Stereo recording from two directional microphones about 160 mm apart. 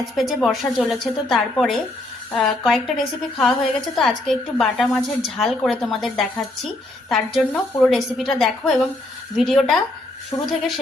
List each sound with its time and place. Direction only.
0.2 s a woman's voice: centre (ahead or behind)
10.3 s a woman's voice: 25° left (ahead or behind)